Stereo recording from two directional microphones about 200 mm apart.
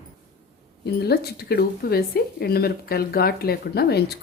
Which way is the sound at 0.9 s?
55° left (ahead or behind).